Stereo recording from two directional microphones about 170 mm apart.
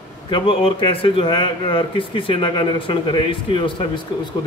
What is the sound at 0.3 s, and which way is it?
Speech, 30° left (ahead or behind).